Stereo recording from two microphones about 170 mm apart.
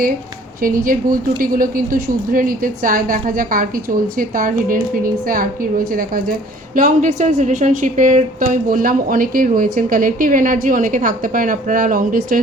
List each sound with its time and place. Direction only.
0.6 s a woman's voice: 55° right (ahead or behind)
6.7 s a woman's voice: 50° right (ahead or behind)